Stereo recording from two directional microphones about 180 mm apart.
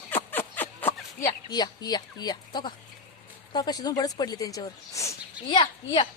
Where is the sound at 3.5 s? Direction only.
20° left (ahead or behind).